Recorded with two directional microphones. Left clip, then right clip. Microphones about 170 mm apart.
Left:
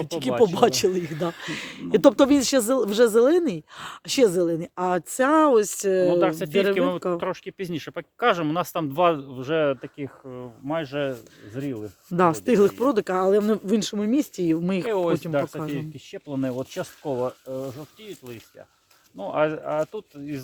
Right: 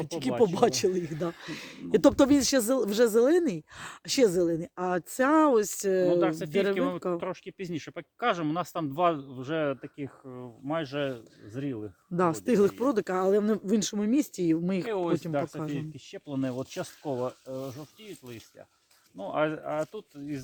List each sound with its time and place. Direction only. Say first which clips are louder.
0.0 s speech: left 5 dB; 5° left (ahead or behind)
2.0 s speech: left 5 dB; centre (ahead or behind)
6.1 s speech: left 5 dB; 60° left (ahead or behind)
10.2 s speech: left 6 dB; 30° left (ahead or behind)
10.7 s speech: left 4 dB; 15° left (ahead or behind)
14.8 s speech: left 7 dB; 60° left (ahead or behind)
15.5 s speech: left 5 dB; centre (ahead or behind)
16.1 s speech: left 5 dB; 25° left (ahead or behind); by 20.4 s 45° left (ahead or behind)